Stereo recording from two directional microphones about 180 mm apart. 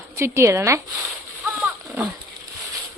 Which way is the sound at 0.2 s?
15° right (ahead or behind).